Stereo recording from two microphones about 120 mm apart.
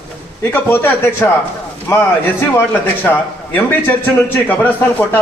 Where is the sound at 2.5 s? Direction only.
15° left (ahead or behind).